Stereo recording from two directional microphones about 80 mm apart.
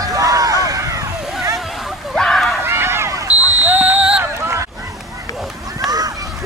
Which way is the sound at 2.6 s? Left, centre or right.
Right.